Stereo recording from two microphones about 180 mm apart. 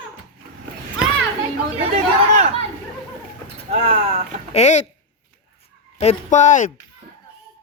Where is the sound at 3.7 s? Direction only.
40° right (ahead or behind).